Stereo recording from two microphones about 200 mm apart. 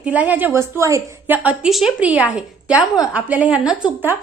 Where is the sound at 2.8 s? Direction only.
20° left (ahead or behind).